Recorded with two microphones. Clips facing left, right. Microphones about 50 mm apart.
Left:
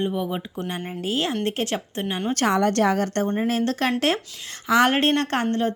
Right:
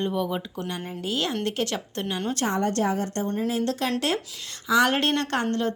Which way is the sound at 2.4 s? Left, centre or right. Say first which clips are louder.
Left 6 dB; left.